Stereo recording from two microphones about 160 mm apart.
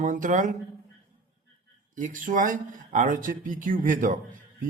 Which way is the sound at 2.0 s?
55° right (ahead or behind).